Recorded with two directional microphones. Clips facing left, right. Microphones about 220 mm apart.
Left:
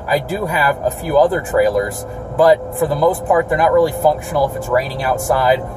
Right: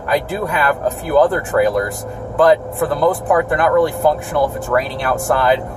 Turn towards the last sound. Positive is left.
turn(degrees=0)  # may be behind; listen again after turning